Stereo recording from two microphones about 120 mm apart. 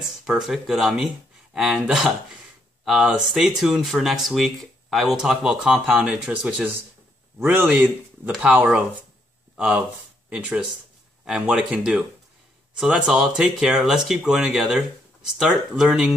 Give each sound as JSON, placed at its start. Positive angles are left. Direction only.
{"t": 0.2, "sound": "speech", "side_deg": -5}
{"t": 7.3, "sound": "speech", "side_deg": -15}
{"t": 11.2, "sound": "speech", "side_deg": -10}